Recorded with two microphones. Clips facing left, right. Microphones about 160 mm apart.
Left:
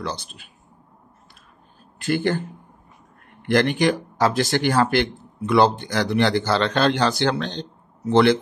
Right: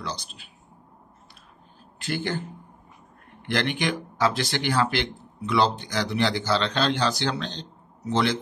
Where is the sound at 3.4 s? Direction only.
45° left (ahead or behind).